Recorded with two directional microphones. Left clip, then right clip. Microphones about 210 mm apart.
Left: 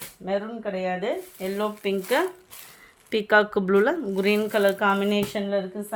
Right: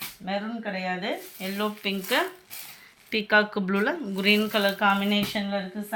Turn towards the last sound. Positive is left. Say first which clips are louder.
# left 4 dB
turn(degrees=55)  # may be behind; listen again after turning